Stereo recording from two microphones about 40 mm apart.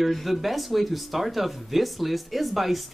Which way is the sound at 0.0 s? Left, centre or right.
Centre.